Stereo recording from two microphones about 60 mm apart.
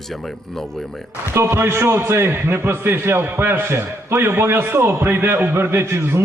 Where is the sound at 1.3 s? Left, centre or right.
Right.